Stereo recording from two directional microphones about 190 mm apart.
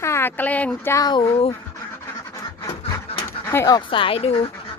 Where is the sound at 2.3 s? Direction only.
20° left (ahead or behind).